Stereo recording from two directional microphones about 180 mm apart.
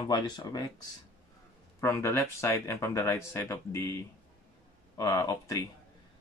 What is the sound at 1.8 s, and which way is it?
Speech, 15° left (ahead or behind).